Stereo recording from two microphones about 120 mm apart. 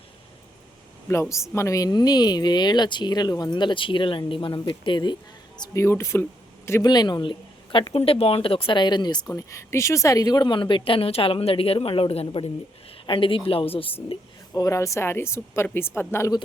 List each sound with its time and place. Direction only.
1.0 s a woman's voice: 25° left (ahead or behind); by 5.1 s 40° left (ahead or behind)
5.7 s a woman's voice: 20° left (ahead or behind)
6.8 s a woman's voice: 35° left (ahead or behind)
9.2 s a woman's voice: 25° left (ahead or behind); by 13.9 s 50° left (ahead or behind)
14.5 s a woman's voice: 30° left (ahead or behind)